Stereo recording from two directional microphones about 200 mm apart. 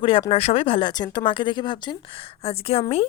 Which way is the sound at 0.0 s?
25° left (ahead or behind).